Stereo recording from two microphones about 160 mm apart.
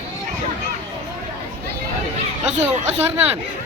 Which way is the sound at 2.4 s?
45° right (ahead or behind).